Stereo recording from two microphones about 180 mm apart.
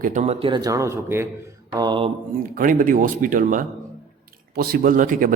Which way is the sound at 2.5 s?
50° right (ahead or behind).